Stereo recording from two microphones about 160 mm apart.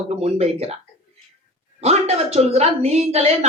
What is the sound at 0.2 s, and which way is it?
Speech, 40° right (ahead or behind).